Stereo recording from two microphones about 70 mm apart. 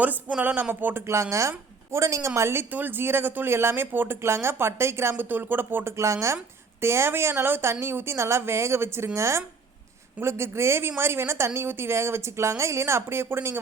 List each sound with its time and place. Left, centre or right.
0.0 s speech: right
1.0 s a woman's voice: right
6.0 s a woman's voice: right